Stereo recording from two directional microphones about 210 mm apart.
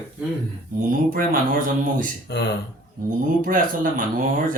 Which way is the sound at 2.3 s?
50° left (ahead or behind).